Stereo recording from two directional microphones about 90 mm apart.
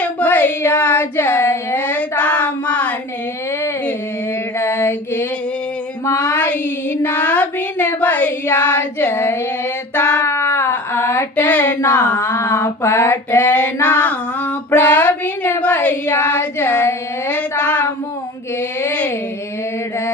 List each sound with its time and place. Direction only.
0.0 s child singing: 15° left (ahead or behind)
4.5 s mantra: 30° left (ahead or behind)
6.1 s a sound: 15° left (ahead or behind)
9.9 s child singing: 20° left (ahead or behind)
10.2 s a sound: 30° left (ahead or behind)
11.3 s child singing: 15° left (ahead or behind)
12.6 s a sound: 30° left (ahead or behind)
13.6 s female singing: 20° left (ahead or behind)
15.6 s child singing: 20° left (ahead or behind)
16.1 s female singing: 20° left (ahead or behind)
17.6 s child singing: 15° left (ahead or behind)
18.8 s a sound: 25° left (ahead or behind)